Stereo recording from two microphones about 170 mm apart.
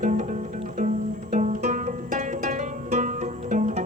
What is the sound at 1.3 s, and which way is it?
Music, 45° right (ahead or behind).